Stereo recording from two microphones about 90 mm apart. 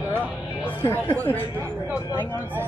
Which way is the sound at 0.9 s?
20° left (ahead or behind).